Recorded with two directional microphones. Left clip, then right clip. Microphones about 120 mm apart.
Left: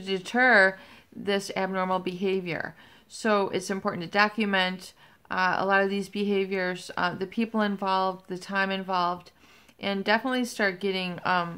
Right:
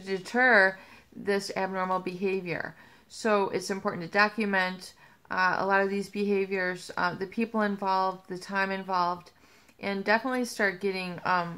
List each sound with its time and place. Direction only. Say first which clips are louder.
0.0 s a woman's voice: left 2 dB; 15° left (ahead or behind)